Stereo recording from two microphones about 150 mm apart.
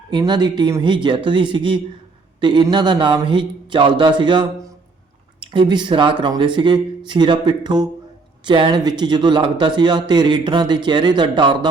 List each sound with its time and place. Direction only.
0.1 s a man's voice: 30° right (ahead or behind)